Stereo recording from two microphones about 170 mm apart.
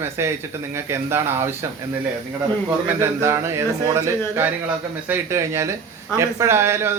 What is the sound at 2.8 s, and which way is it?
A man's voice, 15° right (ahead or behind).